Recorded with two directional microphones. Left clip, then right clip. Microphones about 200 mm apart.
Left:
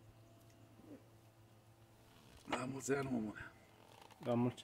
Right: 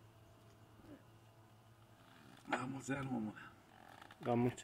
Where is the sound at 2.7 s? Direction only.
65° left (ahead or behind).